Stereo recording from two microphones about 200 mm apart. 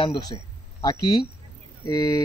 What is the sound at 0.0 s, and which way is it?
Speech, 20° left (ahead or behind).